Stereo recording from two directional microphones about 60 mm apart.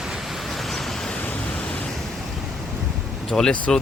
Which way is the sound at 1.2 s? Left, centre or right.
Left.